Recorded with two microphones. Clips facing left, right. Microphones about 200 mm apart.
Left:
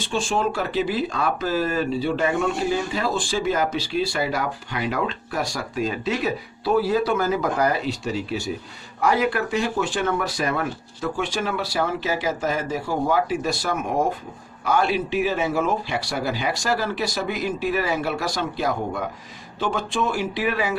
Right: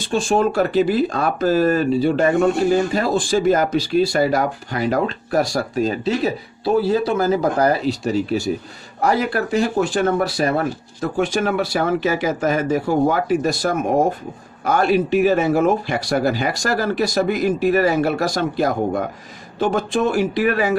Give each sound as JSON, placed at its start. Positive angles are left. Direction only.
{"t": 0.0, "sound": "speech", "side_deg": -40}
{"t": 11.2, "sound": "speech", "side_deg": -50}